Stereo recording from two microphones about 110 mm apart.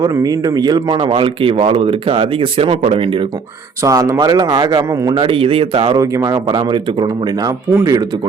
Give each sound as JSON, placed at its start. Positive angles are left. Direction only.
{"t": 0.0, "sound": "speech", "side_deg": -35}
{"t": 3.8, "sound": "speech", "side_deg": -30}
{"t": 4.9, "sound": "a man's voice", "side_deg": -25}
{"t": 5.1, "sound": "speech", "side_deg": -55}
{"t": 6.0, "sound": "speech", "side_deg": -30}